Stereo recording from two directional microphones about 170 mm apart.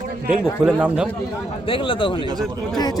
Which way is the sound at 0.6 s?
5° right (ahead or behind).